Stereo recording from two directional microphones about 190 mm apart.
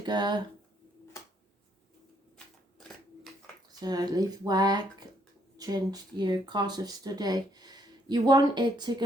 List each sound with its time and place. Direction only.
0.0 s speech: 25° right (ahead or behind)
3.8 s speech: 20° right (ahead or behind)